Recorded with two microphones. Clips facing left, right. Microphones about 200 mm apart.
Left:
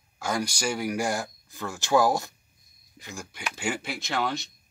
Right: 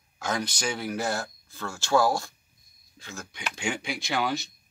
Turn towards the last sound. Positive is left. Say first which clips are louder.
# right 1 dB
turn(degrees=0)  # may be behind; listen again after turning